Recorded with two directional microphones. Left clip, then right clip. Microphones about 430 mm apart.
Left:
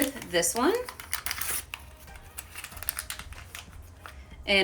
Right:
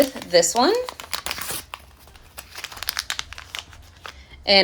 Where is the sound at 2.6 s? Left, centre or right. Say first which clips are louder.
Right 12 dB; centre.